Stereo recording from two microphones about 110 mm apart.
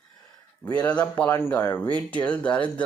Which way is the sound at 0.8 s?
15° left (ahead or behind).